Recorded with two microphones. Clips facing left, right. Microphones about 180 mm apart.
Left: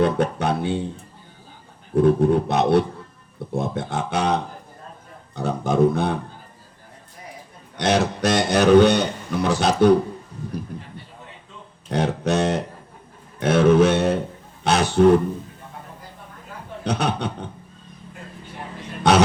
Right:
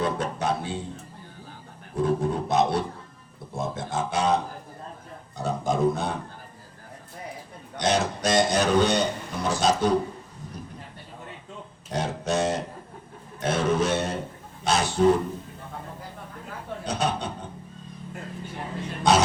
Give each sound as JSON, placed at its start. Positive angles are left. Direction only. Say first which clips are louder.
{"t": 0.0, "sound": "a sound", "louder": "left 6 dB", "side_deg": 60}
{"t": 2.0, "sound": "a man's voice", "louder": "left 8 dB", "side_deg": 65}
{"t": 5.4, "sound": "a man's voice", "louder": "left 5 dB", "side_deg": 65}
{"t": 7.8, "sound": "a man's voice", "louder": "left 4 dB", "side_deg": 65}
{"t": 11.9, "sound": "guitar", "louder": "left 6 dB", "side_deg": 65}
{"t": 13.4, "sound": "a sound", "louder": "left 9 dB", "side_deg": 60}
{"t": 16.8, "sound": "a man's voice", "louder": "left 4 dB", "side_deg": 65}
{"t": 19.1, "sound": "dog", "louder": "left 3 dB", "side_deg": 65}